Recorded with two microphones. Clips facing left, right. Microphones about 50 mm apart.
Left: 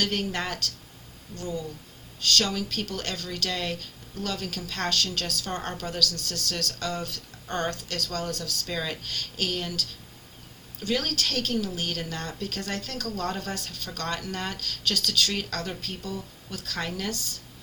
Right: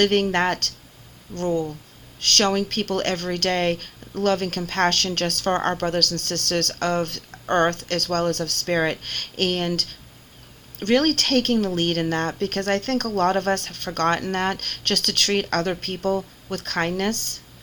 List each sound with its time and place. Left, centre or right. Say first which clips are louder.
0.0 s speech: right 9 dB; right